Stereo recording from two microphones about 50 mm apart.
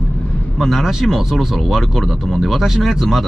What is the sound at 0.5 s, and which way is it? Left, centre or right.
Speech, centre.